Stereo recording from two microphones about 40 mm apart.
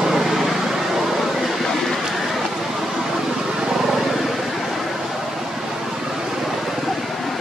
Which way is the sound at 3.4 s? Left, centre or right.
Centre.